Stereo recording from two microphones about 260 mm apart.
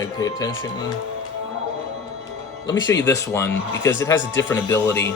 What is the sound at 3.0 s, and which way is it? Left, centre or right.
Speech, centre.